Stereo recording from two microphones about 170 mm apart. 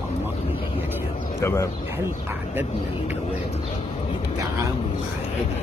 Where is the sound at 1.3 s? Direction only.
15° left (ahead or behind).